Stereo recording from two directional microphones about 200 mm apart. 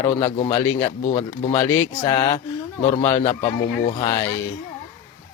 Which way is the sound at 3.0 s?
15° left (ahead or behind).